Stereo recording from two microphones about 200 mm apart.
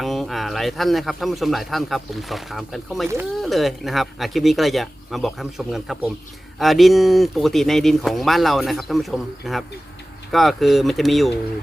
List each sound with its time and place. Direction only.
0.0 s speech: centre (ahead or behind)